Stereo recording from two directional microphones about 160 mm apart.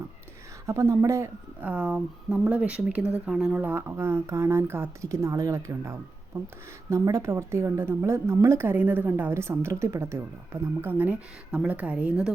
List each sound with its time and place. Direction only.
0.7 s a woman's voice: 15° right (ahead or behind)